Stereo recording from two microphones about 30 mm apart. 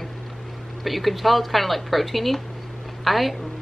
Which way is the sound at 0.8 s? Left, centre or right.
Centre.